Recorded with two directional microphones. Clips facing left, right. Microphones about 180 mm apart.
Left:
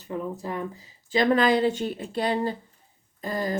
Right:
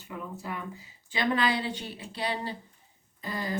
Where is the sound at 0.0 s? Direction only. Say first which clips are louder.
Left 7 dB; 35° left (ahead or behind).